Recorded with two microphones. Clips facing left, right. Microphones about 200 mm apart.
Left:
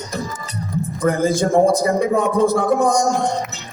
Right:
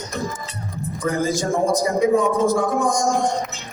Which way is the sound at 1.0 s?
60° left (ahead or behind).